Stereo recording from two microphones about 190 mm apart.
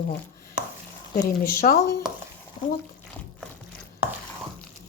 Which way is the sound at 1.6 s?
40° left (ahead or behind).